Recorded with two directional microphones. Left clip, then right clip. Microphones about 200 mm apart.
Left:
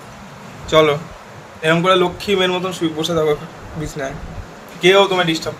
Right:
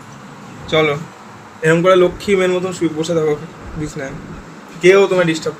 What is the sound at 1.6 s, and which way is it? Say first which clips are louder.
A man's voice: right 3 dB; 25° left (ahead or behind).